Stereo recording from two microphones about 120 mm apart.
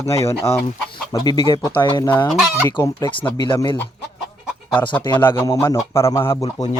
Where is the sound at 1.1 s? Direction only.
40° left (ahead or behind).